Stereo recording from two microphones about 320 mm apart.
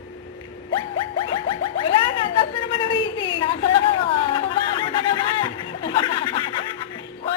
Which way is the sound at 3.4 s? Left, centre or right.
Centre.